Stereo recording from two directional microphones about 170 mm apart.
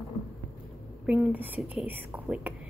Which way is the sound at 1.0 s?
5° right (ahead or behind).